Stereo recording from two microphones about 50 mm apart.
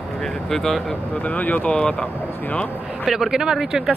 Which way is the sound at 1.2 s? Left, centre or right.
Left.